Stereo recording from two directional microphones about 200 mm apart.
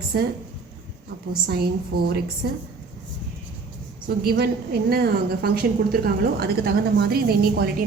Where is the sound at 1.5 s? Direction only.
50° right (ahead or behind).